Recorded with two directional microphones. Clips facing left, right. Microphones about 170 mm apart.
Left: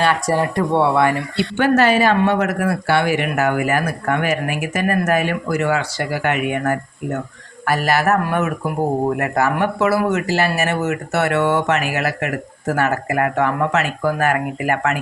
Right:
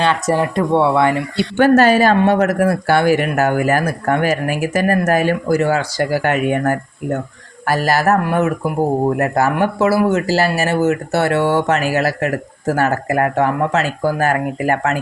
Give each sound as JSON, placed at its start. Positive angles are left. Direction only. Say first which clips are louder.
{"t": 0.0, "sound": "speech", "louder": "right 1 dB", "side_deg": -20}
{"t": 1.5, "sound": "speech", "louder": "right 4 dB", "side_deg": -40}